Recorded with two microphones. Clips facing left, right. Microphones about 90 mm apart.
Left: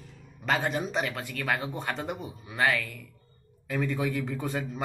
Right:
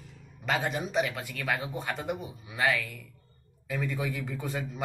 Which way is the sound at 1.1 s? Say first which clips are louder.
Left 2 dB; 10° right (ahead or behind).